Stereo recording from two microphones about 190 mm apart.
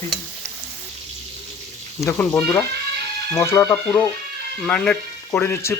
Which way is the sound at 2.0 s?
10° left (ahead or behind).